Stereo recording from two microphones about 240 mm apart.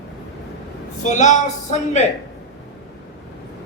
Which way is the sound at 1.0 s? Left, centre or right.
Left.